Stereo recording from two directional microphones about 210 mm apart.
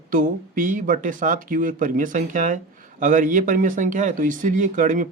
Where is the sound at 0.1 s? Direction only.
40° right (ahead or behind).